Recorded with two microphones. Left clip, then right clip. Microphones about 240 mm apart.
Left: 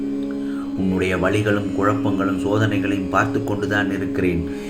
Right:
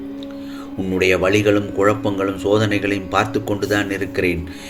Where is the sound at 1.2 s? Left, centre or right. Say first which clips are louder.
Right 4 dB; right.